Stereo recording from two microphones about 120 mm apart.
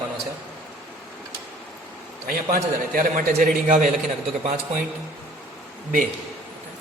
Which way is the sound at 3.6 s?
90° right.